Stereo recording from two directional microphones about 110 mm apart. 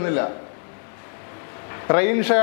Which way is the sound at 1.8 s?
20° left (ahead or behind).